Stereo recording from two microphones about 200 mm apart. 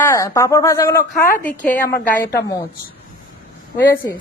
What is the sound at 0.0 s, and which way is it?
Speech, 15° left (ahead or behind).